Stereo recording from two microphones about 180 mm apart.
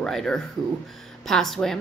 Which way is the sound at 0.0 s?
5° left (ahead or behind).